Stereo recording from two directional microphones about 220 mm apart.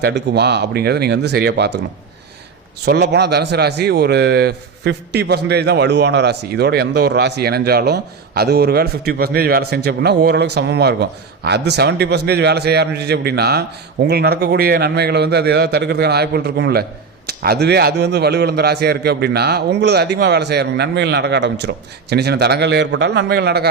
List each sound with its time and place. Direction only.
0.0 s speech: 50° right (ahead or behind)
2.8 s speech: 50° right (ahead or behind)